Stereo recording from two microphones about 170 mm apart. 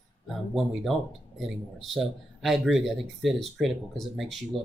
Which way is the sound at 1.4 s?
Centre (ahead or behind).